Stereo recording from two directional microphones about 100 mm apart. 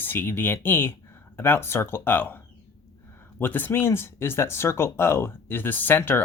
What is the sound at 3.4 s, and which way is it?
Speech, 20° left (ahead or behind).